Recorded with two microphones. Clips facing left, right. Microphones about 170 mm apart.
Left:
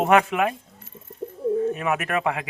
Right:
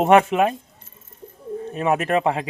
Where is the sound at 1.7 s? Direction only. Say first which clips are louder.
Right 5 dB; 30° right (ahead or behind).